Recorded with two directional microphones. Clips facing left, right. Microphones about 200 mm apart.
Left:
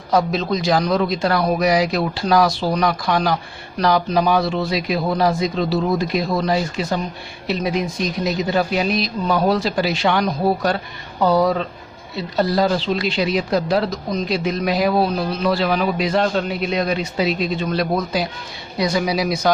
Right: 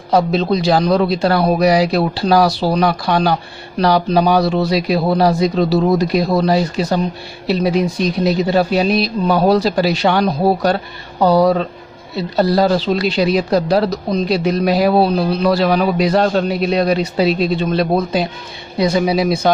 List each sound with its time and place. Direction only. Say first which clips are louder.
0.1 s speech: right 4 dB; 30° right (ahead or behind)